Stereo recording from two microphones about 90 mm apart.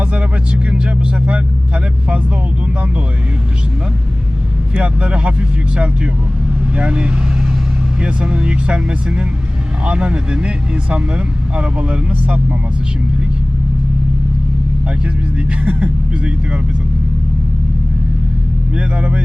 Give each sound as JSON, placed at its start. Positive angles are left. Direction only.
{"t": 0.0, "sound": "vehicle", "side_deg": -15}
{"t": 4.7, "sound": "speech", "side_deg": -15}
{"t": 15.6, "sound": "speech", "side_deg": -15}